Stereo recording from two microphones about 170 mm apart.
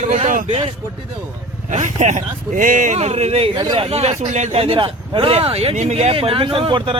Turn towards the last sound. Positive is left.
turn(degrees=-30)  # may be behind; listen again after turning